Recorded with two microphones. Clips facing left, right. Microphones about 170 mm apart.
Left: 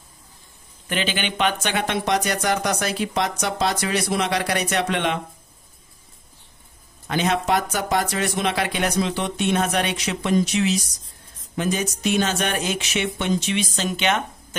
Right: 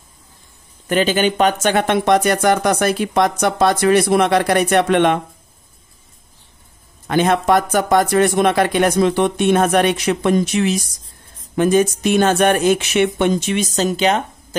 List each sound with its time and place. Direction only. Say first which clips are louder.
0.8 s speech: right 10 dB; 45° right (ahead or behind)
7.1 s speech: right 6 dB; 55° right (ahead or behind); by 14.2 s 35° right (ahead or behind)